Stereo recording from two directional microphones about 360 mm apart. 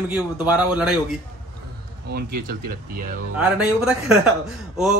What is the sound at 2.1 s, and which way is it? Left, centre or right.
Speech, right.